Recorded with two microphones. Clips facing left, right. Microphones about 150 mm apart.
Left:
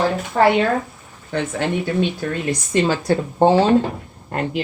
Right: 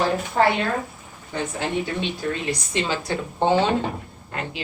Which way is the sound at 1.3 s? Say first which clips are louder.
Left 4 dB; 60° left (ahead or behind).